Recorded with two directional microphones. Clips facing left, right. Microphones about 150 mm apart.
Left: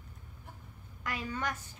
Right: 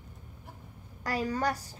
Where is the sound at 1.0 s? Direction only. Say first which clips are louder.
Right 7 dB; 35° right (ahead or behind).